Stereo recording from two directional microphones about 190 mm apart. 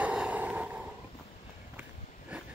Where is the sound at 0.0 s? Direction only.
5° right (ahead or behind).